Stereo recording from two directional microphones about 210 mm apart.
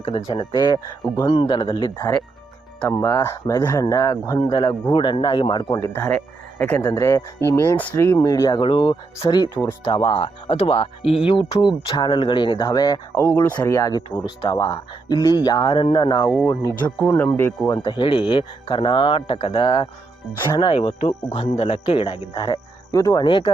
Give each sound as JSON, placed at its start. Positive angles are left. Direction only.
{"t": 0.3, "sound": "speech", "side_deg": 20}
{"t": 17.0, "sound": "speech", "side_deg": 5}
{"t": 17.8, "sound": "speech", "side_deg": 25}
{"t": 20.4, "sound": "speech", "side_deg": 15}
{"t": 20.7, "sound": "speech", "side_deg": 25}